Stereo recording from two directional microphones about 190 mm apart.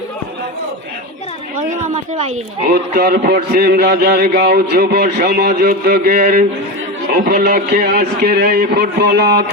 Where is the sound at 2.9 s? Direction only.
50° right (ahead or behind).